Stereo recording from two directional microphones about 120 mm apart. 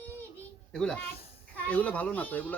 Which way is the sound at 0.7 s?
5° left (ahead or behind).